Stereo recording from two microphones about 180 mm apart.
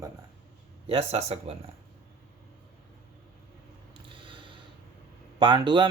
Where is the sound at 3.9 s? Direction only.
25° right (ahead or behind).